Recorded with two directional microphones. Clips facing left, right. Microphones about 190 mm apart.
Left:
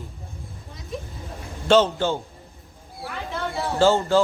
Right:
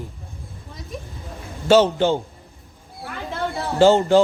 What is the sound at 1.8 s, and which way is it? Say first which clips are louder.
Speech: right 5 dB; 20° right (ahead or behind).